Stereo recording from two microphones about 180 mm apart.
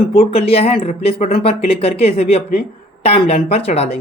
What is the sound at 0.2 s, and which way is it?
Speech, 35° left (ahead or behind).